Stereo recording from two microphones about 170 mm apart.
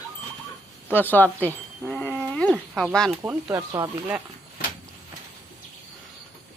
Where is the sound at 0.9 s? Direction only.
10° left (ahead or behind).